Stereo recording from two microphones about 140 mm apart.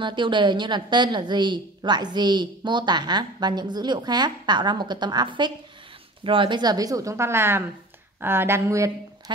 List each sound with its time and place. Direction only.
0.0 s a woman's voice: 35° right (ahead or behind)